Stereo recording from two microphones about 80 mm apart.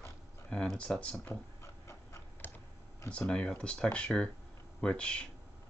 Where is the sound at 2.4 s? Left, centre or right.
Left.